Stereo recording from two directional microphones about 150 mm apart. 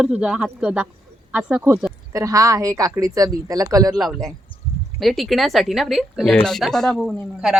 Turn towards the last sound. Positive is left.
turn(degrees=-5)  # may be behind; listen again after turning